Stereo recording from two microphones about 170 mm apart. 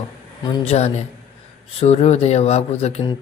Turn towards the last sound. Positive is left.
turn(degrees=40)  # may be behind; listen again after turning